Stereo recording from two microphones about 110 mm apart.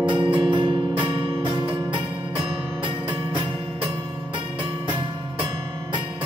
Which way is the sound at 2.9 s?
10° right (ahead or behind).